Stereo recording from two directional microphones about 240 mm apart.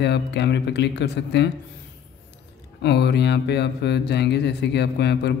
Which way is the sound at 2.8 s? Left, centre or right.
Left.